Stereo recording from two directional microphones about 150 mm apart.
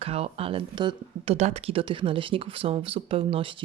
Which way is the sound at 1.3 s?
45° right (ahead or behind).